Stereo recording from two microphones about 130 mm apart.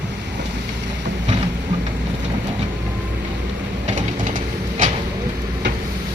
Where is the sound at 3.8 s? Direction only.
70° right (ahead or behind).